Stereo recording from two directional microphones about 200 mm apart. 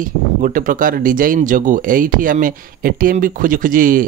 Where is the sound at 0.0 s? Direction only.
45° right (ahead or behind).